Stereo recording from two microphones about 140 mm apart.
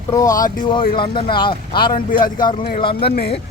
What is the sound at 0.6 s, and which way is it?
A man's voice, 35° left (ahead or behind).